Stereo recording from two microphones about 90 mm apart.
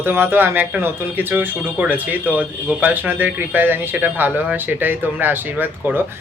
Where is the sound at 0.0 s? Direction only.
25° right (ahead or behind).